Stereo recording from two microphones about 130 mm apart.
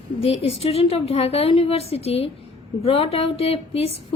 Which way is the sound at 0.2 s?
50° left (ahead or behind).